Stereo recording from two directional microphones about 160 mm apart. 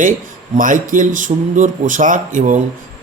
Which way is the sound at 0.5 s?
55° right (ahead or behind).